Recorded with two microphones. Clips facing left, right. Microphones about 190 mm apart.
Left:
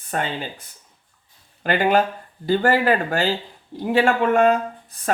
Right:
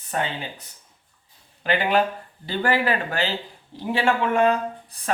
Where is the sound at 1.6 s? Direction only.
45° left (ahead or behind).